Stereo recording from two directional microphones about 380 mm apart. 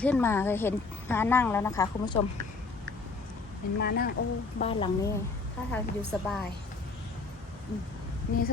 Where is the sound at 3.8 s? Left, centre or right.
Left.